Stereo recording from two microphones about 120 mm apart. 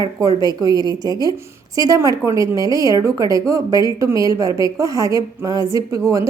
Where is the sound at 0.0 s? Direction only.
30° right (ahead or behind).